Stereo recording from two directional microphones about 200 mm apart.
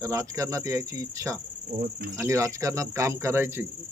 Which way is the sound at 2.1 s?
15° right (ahead or behind).